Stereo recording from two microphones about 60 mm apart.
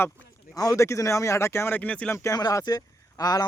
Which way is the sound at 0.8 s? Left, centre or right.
Left.